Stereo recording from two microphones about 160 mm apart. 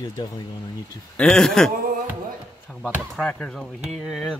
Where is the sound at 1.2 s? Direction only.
5° left (ahead or behind).